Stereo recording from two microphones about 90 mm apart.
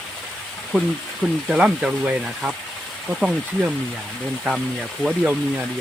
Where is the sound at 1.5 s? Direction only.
5° right (ahead or behind).